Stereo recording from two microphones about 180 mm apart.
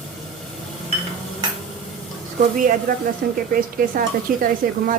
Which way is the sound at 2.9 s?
50° right (ahead or behind).